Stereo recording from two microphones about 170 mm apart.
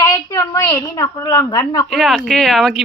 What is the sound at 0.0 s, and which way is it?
A woman's voice, 20° left (ahead or behind).